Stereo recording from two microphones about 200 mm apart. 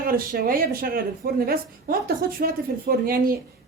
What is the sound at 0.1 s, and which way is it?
Speech, 45° right (ahead or behind).